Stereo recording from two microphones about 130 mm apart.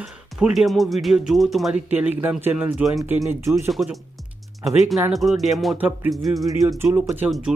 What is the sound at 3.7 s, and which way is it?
Speech, centre (ahead or behind).